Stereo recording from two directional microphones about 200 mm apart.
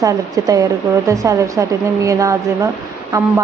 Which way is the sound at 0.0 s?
15° right (ahead or behind).